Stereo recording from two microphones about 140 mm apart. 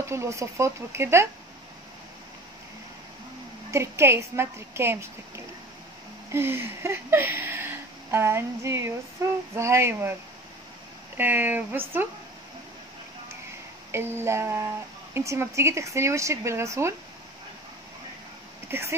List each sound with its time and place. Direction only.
0.0 s speech: 20° right (ahead or behind)
3.7 s speech: 20° right (ahead or behind)
11.1 s speech: 15° right (ahead or behind)
13.9 s speech: 15° right (ahead or behind)
18.7 s speech: 20° right (ahead or behind)